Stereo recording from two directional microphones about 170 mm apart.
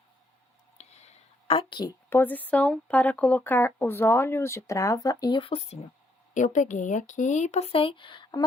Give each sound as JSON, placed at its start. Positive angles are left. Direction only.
{"t": 0.8, "sound": "a woman's voice", "side_deg": 40}
{"t": 6.3, "sound": "speech", "side_deg": 45}